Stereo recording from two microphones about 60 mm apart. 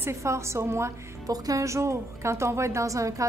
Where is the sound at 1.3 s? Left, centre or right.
Right.